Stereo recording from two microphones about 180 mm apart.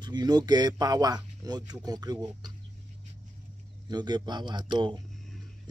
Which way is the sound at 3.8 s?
25° right (ahead or behind).